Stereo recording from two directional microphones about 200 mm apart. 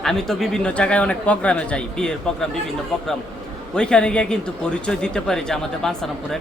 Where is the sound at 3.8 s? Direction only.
5° left (ahead or behind).